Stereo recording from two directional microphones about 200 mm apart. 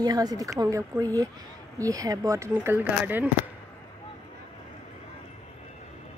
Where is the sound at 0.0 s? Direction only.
20° right (ahead or behind).